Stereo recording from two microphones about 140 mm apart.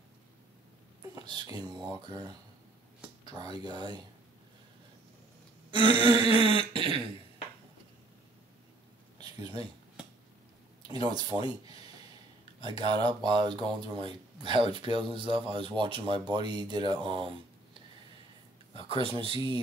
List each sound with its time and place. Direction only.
1.1 s speech: 30° right (ahead or behind)
5.7 s throat clearing: 35° right (ahead or behind)
9.2 s a sound: 30° right (ahead or behind)
12.6 s speech: 35° right (ahead or behind)
18.9 s speech: 40° right (ahead or behind)